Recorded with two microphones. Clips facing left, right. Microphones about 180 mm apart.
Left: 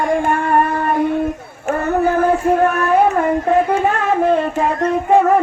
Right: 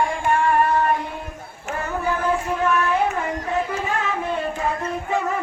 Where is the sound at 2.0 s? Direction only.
55° left (ahead or behind).